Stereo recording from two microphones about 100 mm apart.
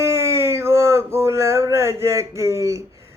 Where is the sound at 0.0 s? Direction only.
25° right (ahead or behind).